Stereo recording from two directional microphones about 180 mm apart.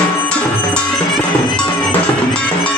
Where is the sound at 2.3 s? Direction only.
5° left (ahead or behind).